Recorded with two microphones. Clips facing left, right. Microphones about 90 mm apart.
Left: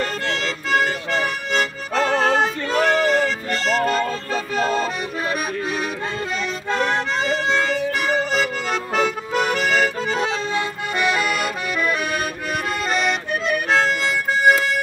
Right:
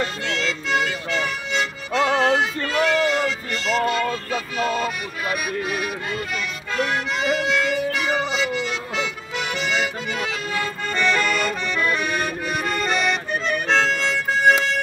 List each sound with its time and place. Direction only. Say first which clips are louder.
0.0 s music: left 1 dB; 35° left (ahead or behind)
7.2 s harmonica: right 1 dB; 30° left (ahead or behind)
8.9 s music: left 7 dB; 45° left (ahead or behind)
11.0 s accordion: even; 10° left (ahead or behind)